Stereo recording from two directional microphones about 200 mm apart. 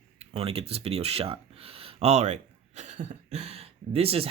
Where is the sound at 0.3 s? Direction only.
30° right (ahead or behind).